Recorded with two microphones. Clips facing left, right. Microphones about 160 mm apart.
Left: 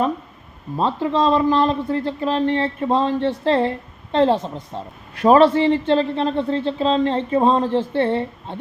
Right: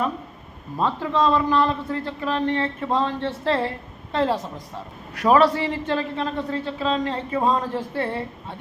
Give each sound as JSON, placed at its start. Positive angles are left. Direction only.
{"t": 1.1, "sound": "a man's voice", "side_deg": 30}